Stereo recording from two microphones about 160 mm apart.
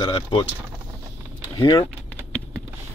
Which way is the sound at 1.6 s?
30° left (ahead or behind).